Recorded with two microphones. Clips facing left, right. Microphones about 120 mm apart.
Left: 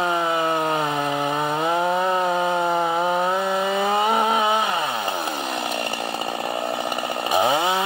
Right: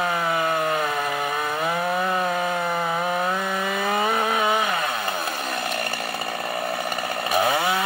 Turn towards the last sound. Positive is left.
turn(degrees=20)  # may be behind; listen again after turning